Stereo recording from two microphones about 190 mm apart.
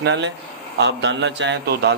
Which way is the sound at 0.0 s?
70° right (ahead or behind).